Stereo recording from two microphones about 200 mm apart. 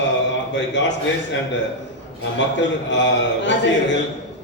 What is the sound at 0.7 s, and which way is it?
Speech, 65° left (ahead or behind).